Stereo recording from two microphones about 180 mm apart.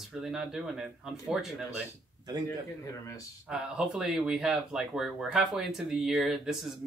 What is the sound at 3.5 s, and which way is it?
Speech, 5° right (ahead or behind).